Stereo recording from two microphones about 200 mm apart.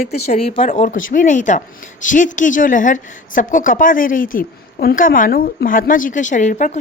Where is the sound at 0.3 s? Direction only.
30° left (ahead or behind).